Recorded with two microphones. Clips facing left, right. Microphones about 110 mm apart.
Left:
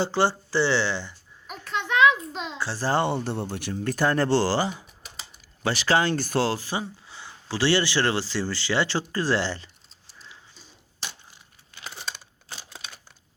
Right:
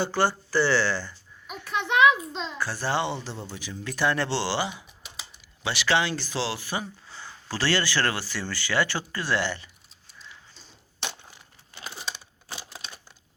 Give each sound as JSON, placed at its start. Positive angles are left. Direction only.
{"t": 0.0, "sound": "speech", "side_deg": 25}
{"t": 1.6, "sound": "a sound", "side_deg": -15}
{"t": 2.3, "sound": "a child's voice", "side_deg": 10}
{"t": 2.6, "sound": "speech", "side_deg": 30}
{"t": 3.9, "sound": "speech", "side_deg": 40}
{"t": 6.6, "sound": "speech", "side_deg": 30}